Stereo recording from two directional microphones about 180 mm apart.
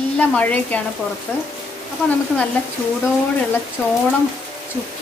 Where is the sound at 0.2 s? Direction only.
10° left (ahead or behind).